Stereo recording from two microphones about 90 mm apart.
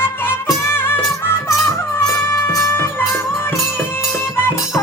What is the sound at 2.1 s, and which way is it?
Music, 30° left (ahead or behind).